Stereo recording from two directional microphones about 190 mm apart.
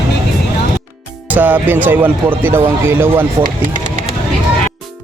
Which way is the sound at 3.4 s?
45° right (ahead or behind).